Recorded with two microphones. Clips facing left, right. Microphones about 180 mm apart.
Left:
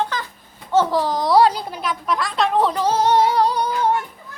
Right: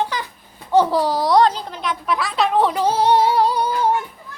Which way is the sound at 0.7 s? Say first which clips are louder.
Right 2 dB; 15° right (ahead or behind).